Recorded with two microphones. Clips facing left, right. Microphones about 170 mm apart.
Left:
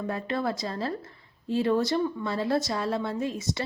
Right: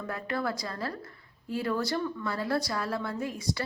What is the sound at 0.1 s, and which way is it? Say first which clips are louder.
A woman's voice: left 1 dB; 25° left (ahead or behind).